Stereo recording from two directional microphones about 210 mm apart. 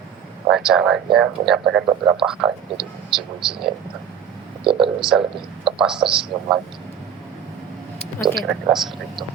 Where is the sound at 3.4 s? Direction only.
5° right (ahead or behind).